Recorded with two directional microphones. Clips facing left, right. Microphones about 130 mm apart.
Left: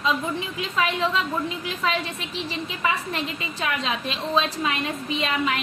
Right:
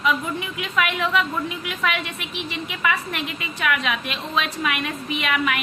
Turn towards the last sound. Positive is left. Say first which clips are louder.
# right 1 dB
turn(degrees=30)  # may be behind; listen again after turning